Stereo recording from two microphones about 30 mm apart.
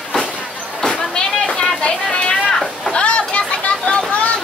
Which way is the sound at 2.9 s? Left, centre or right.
Left.